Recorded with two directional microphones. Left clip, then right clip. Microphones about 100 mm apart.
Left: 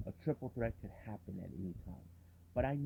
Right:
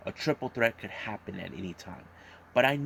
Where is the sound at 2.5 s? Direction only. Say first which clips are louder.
Right 13 dB; 10° right (ahead or behind).